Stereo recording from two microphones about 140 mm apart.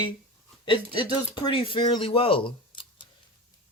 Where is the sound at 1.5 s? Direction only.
40° left (ahead or behind).